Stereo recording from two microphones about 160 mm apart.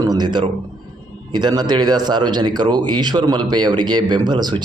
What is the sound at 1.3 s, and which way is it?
Speech, 25° right (ahead or behind).